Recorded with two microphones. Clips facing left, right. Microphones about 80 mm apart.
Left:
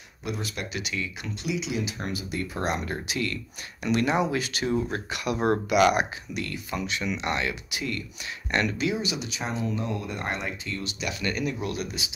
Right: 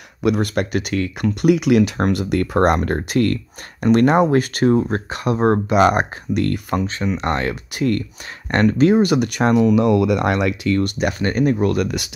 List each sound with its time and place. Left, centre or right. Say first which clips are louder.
0.2 s speech: right 14 dB; right
6.3 s speech: right 13 dB; right